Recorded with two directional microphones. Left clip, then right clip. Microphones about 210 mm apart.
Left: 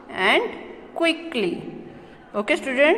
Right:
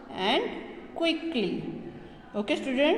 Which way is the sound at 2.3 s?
5° left (ahead or behind).